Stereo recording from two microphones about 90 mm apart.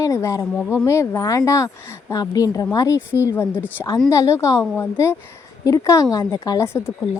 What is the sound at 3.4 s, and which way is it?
A woman's voice, 25° left (ahead or behind).